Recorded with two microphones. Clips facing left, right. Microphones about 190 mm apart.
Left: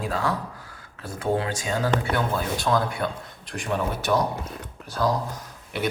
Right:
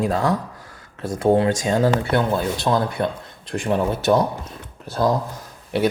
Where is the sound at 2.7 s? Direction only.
25° right (ahead or behind).